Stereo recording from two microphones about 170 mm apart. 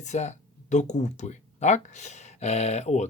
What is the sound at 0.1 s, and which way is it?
Speech, 40° left (ahead or behind).